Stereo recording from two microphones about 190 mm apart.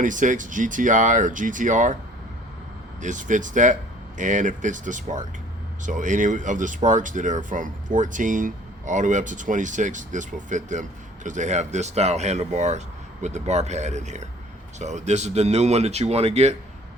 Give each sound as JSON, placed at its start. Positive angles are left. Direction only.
{"t": 0.0, "sound": "speech", "side_deg": -40}
{"t": 3.0, "sound": "speech", "side_deg": -40}